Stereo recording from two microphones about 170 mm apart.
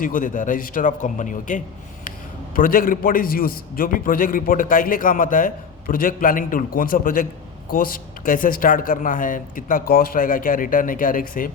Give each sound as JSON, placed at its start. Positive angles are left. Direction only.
{"t": 0.0, "sound": "a man's voice", "side_deg": 50}